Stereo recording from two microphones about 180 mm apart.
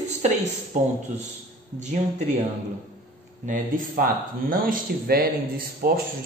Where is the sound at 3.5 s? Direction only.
50° right (ahead or behind).